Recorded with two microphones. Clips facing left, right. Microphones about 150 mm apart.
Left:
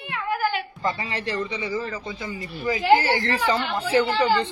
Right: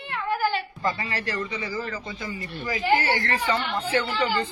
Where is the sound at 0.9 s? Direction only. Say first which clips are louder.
Left 2 dB; 30° left (ahead or behind).